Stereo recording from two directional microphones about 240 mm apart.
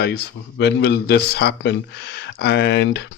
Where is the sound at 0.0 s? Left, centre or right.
Left.